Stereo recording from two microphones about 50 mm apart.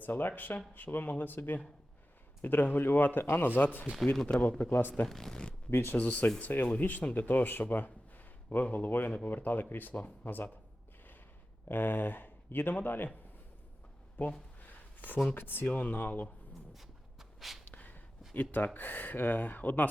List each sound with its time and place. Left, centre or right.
0.0 s speech: left
4.0 s speech: centre
4.4 s a man's voice: left
5.0 s speech: centre
5.7 s speech: left
6.0 s speech: left
11.7 s speech: left
14.2 s speech: left
14.6 s a sound: left
15.4 s speech: left
15.6 s speech: left
16.7 s walk: centre
17.7 s a sound: left
18.3 s speech: left